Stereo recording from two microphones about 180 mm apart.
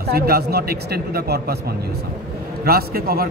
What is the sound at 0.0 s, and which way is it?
A man's voice, 60° right (ahead or behind).